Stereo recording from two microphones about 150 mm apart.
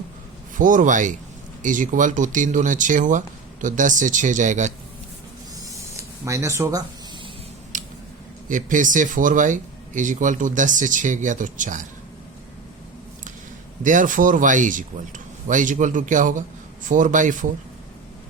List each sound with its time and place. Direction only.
0.5 s speech: 60° right (ahead or behind)
5.5 s a sound: 20° right (ahead or behind)
7.7 s squish: 60° right (ahead or behind)
8.4 s speech: 60° right (ahead or behind)
13.8 s speech: 60° right (ahead or behind)